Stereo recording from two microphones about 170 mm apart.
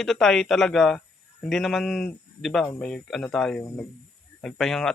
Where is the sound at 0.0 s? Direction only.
Centre (ahead or behind).